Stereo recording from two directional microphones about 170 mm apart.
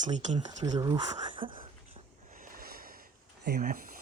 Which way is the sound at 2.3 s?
55° right (ahead or behind).